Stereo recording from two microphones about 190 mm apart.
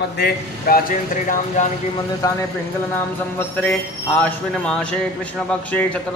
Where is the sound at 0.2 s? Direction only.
50° left (ahead or behind).